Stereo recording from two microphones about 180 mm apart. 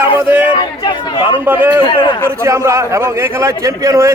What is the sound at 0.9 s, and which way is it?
Chatter, 25° left (ahead or behind).